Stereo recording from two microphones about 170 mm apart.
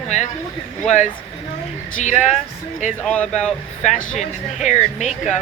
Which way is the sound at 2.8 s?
45° left (ahead or behind).